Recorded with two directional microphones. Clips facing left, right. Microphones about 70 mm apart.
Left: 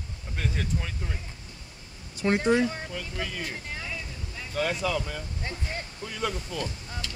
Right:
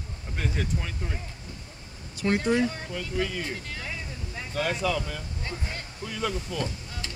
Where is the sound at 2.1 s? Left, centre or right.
Left.